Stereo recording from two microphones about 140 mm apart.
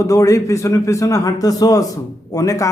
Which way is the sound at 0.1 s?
20° left (ahead or behind).